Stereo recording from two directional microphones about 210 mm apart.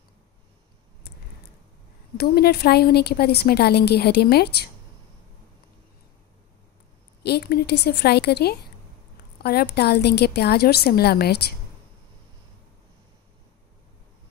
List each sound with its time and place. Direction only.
2.1 s a woman's voice: 50° left (ahead or behind)
7.2 s a woman's voice: 50° left (ahead or behind)